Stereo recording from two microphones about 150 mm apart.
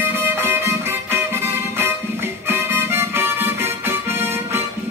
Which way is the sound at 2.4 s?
15° right (ahead or behind).